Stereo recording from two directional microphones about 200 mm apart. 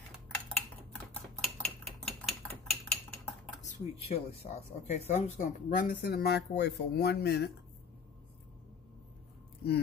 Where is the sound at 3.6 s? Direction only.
35° left (ahead or behind).